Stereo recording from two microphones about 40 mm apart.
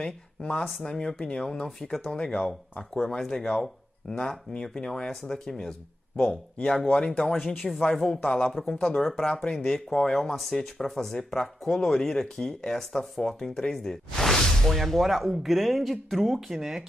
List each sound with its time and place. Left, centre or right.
0.0 s speech: left
3.2 s speech: centre
6.9 s speech: left
7.9 s speech: centre
8.2 s speech: left
8.9 s speech: centre
9.2 s speech: left
9.5 s speech: centre
10.3 s speech: centre